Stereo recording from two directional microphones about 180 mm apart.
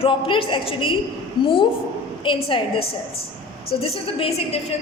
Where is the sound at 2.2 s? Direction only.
30° left (ahead or behind).